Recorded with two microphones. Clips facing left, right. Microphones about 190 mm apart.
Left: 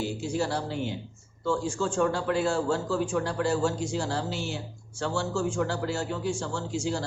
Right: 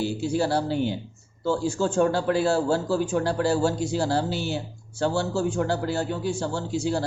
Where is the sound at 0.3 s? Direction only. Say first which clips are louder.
Right 6 dB; 35° right (ahead or behind).